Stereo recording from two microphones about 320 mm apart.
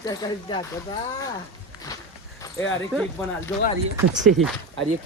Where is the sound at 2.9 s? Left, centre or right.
Centre.